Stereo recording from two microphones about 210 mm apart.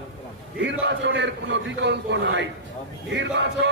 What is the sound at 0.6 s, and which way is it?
A man's voice, 55° right (ahead or behind).